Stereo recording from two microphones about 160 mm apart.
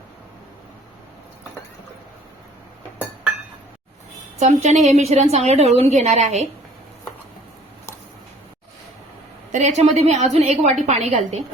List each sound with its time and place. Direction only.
4.4 s a woman's voice: 45° right (ahead or behind)
9.5 s a woman's voice: 45° right (ahead or behind)